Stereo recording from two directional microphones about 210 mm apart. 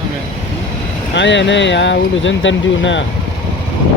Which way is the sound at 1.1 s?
60° left (ahead or behind).